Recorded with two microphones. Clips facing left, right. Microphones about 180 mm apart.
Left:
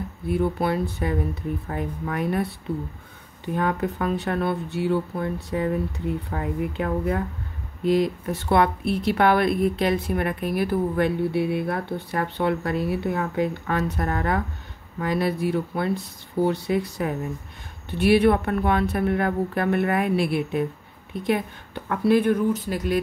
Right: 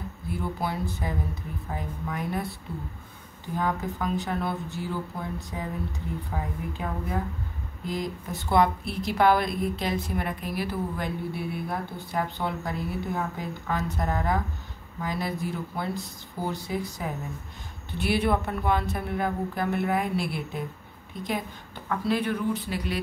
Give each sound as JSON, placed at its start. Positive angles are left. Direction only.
{"t": 0.3, "sound": "speech", "side_deg": 65}
{"t": 3.4, "sound": "a woman's voice", "side_deg": 65}